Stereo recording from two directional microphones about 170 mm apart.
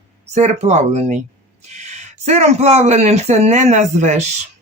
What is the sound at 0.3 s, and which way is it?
Speech, 40° right (ahead or behind).